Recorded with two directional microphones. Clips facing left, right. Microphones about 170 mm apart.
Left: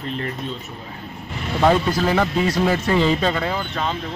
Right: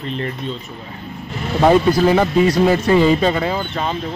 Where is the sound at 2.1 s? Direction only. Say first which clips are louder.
Right 5 dB; 15° right (ahead or behind).